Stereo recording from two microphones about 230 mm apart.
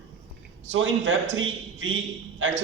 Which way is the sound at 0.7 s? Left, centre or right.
Right.